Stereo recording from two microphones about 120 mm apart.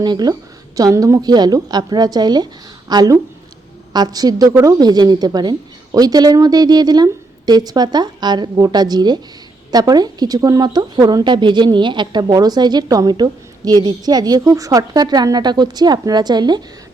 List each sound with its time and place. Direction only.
0.0 s a woman's voice: 35° right (ahead or behind)